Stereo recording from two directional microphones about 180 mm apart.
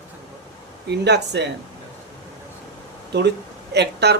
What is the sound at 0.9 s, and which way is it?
Speech, 70° right (ahead or behind).